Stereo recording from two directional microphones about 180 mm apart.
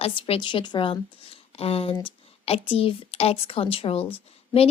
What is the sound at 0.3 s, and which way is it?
A woman's voice, 25° left (ahead or behind).